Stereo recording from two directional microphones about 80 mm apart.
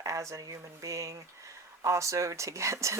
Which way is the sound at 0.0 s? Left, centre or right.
Right.